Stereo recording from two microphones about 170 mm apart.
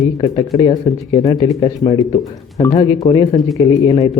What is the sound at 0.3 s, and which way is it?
Speech, 25° left (ahead or behind).